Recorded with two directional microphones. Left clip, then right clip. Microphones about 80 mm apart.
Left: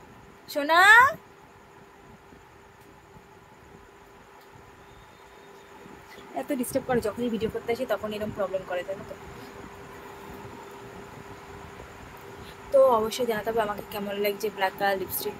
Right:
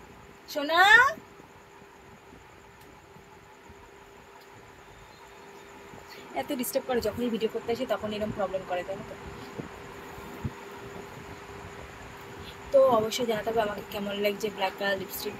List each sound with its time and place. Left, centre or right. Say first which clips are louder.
0.5 s speech: left 2 dB; left
6.3 s speech: left 1 dB; left
7.7 s speech: left 1 dB; left
12.7 s speech: left 1 dB; left